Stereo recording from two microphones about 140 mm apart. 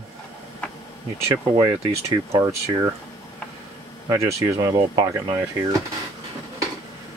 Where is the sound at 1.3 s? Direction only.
30° right (ahead or behind).